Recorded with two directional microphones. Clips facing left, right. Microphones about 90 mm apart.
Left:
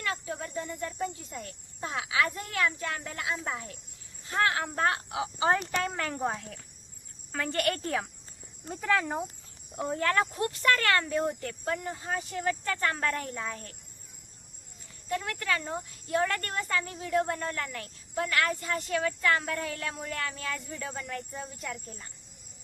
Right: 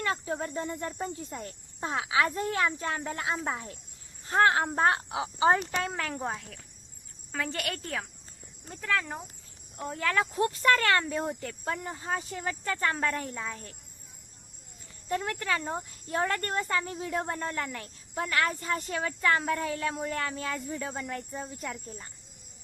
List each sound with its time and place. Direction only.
0.0 s speech: 30° right (ahead or behind)
5.5 s speech: 5° right (ahead or behind); by 9.2 s 15° left (ahead or behind)
10.0 s speech: centre (ahead or behind)
10.3 s speech: 25° right (ahead or behind)
13.0 s speech: 5° right (ahead or behind)
15.1 s speech: 25° right (ahead or behind)